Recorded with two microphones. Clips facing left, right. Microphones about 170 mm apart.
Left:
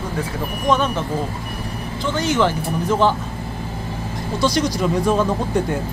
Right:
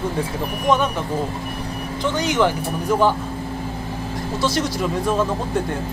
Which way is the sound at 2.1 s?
15° right (ahead or behind).